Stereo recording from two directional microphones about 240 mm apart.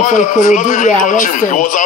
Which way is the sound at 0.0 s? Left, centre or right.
Left.